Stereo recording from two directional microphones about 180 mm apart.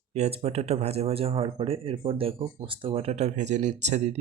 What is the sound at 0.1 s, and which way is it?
Speech, 35° right (ahead or behind).